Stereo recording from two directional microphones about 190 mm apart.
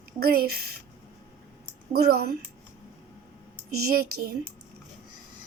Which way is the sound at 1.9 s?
55° right (ahead or behind).